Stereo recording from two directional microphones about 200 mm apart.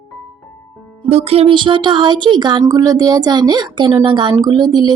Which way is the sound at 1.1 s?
30° right (ahead or behind).